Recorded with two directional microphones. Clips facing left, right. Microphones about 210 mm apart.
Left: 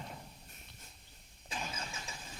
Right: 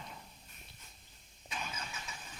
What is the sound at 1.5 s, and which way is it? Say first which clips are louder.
Vehicle: left 1 dB; 30° left (ahead or behind).